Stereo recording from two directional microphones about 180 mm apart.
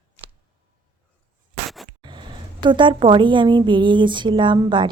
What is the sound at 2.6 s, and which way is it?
Speech, 25° right (ahead or behind).